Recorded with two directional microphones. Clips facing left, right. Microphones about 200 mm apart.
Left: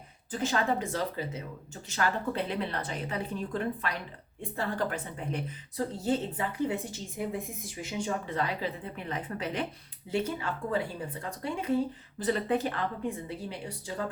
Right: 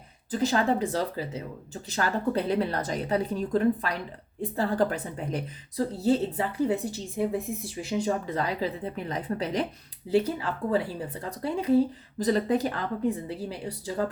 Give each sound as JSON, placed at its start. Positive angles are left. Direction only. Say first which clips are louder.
{"t": 0.3, "sound": "speech", "louder": "right 5 dB", "side_deg": -35}